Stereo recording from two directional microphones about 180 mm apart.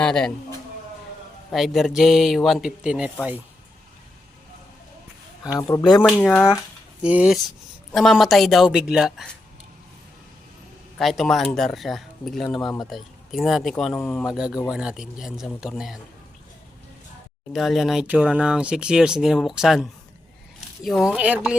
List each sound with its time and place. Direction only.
0.0 s a man's voice: 5° left (ahead or behind)
1.5 s speech: centre (ahead or behind)
5.4 s speech: 20° left (ahead or behind)
6.1 s speech: 5° left (ahead or behind)
7.0 s speech: 5° right (ahead or behind)
10.9 s speech: centre (ahead or behind)
12.6 s speech: 20° left (ahead or behind)
12.9 s speech: centre (ahead or behind)
14.3 s speech: 5° right (ahead or behind)
17.5 s speech: centre (ahead or behind)